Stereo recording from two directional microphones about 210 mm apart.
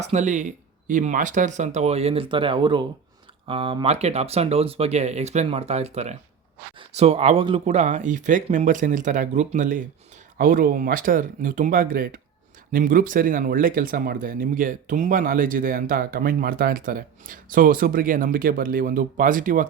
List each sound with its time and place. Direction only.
0.0 s speech: 35° right (ahead or behind)